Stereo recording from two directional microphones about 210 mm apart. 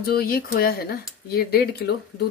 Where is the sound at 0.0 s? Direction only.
45° left (ahead or behind).